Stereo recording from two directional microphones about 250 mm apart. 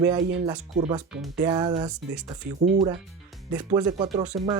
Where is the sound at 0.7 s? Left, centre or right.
Right.